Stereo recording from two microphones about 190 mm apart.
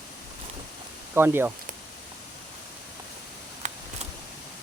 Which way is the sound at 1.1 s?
10° right (ahead or behind).